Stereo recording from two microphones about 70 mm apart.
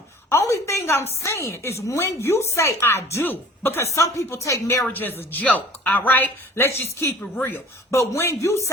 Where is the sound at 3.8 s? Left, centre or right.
Left.